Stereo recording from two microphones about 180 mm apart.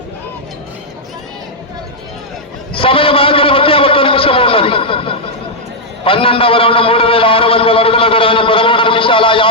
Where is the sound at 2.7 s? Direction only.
30° left (ahead or behind).